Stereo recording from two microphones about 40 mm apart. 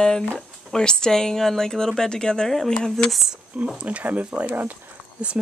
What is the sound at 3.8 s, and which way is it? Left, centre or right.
Speech, right.